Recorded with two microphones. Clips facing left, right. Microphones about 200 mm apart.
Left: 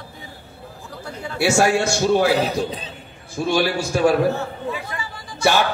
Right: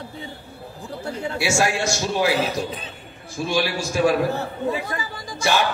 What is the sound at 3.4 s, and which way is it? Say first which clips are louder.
Speech: left 3 dB; 60° left (ahead or behind).